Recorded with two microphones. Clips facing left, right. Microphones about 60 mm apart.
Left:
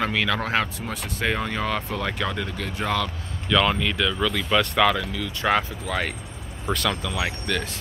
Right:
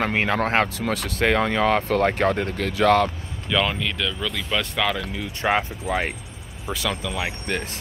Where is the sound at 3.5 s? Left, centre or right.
Centre.